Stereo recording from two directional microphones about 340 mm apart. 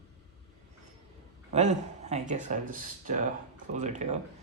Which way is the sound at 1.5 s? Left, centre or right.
Centre.